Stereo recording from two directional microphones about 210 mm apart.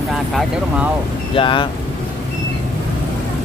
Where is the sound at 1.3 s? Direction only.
25° left (ahead or behind).